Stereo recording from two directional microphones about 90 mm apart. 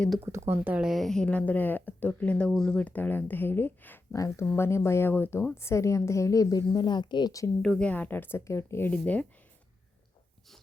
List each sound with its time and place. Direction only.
0.3 s speech: 30° right (ahead or behind)
0.8 s speech: centre (ahead or behind); by 4.0 s 25° left (ahead or behind)
4.1 s a woman's voice: 40° left (ahead or behind); by 7.3 s 55° left (ahead or behind)
7.6 s a woman's voice: 5° left (ahead or behind)
7.9 s speech: 20° left (ahead or behind)
8.9 s speech: 15° left (ahead or behind)